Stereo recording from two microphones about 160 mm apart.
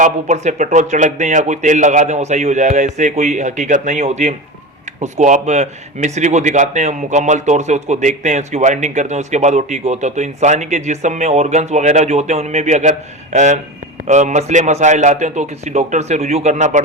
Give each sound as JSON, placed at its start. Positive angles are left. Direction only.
{"t": 0.0, "sound": "speech", "side_deg": -45}